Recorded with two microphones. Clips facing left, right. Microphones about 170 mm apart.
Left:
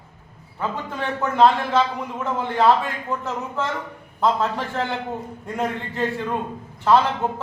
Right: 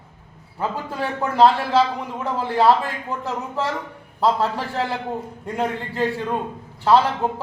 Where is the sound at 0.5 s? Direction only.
35° right (ahead or behind).